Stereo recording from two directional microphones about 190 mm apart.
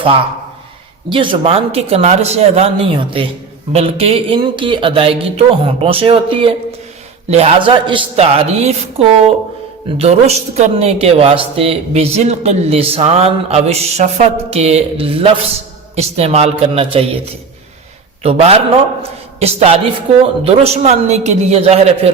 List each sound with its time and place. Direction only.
1.1 s speech: 25° right (ahead or behind)
18.2 s a man's voice: 30° right (ahead or behind)